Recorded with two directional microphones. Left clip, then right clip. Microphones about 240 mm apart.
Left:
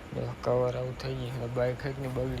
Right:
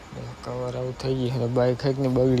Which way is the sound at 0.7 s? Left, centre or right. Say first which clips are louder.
Right 5 dB; right.